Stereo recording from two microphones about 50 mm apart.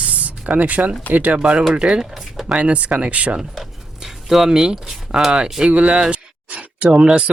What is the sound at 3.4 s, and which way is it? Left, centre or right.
Speech, centre.